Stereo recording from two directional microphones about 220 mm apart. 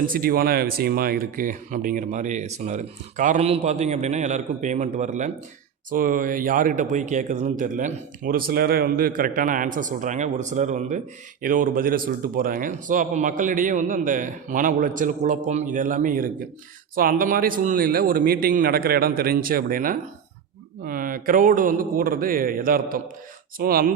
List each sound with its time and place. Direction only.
0.1 s speech: 40° right (ahead or behind)